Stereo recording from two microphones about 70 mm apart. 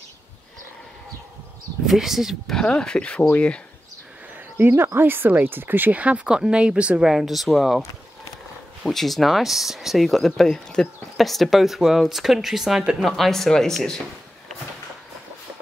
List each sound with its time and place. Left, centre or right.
1.9 s speech: centre
2.5 s speech: centre
4.6 s speech: right; by 7.1 s centre
7.1 s speech: centre
8.8 s speech: centre